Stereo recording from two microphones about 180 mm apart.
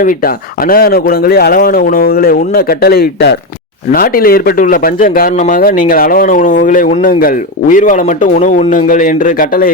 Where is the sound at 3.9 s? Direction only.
55° left (ahead or behind).